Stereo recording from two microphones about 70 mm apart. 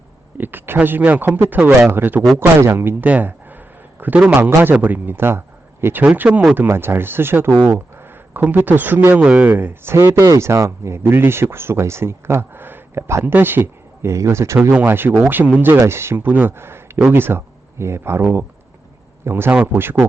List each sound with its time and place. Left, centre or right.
0.3 s a sound: right
0.8 s a man's voice: right
8.3 s speech: right
13.2 s speech: right
14.6 s speech: right
15.4 s speech: centre
15.8 s speech: right
18.2 s speech: right